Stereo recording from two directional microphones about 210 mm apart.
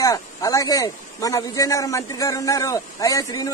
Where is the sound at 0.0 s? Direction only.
15° left (ahead or behind).